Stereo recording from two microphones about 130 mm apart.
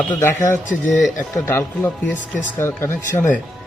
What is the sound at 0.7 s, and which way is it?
Speech, centre (ahead or behind).